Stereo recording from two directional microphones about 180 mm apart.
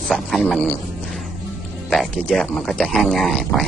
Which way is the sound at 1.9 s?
Centre (ahead or behind).